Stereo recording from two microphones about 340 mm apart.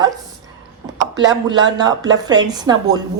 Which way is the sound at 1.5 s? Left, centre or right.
Centre.